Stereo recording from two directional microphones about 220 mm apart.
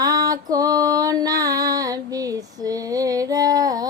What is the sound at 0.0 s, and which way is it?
Music, 15° right (ahead or behind).